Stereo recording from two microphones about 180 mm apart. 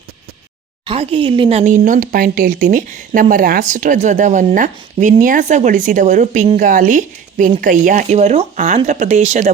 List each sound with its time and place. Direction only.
0.9 s speech: 30° right (ahead or behind)